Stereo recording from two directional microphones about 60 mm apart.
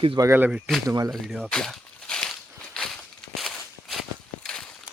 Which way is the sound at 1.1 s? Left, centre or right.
Centre.